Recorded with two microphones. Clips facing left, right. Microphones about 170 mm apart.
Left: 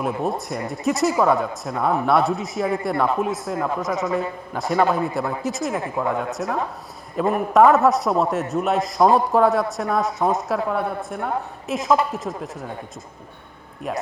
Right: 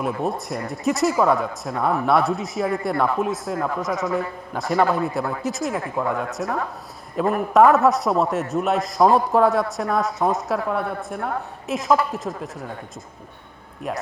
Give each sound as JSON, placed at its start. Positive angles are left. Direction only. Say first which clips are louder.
{"t": 0.0, "sound": "a man's voice", "louder": "left 1 dB", "side_deg": 0}